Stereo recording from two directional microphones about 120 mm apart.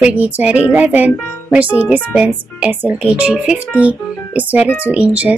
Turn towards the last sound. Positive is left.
turn(degrees=-10)  # may be behind; listen again after turning